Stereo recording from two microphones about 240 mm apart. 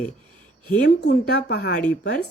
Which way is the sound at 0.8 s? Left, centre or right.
Left.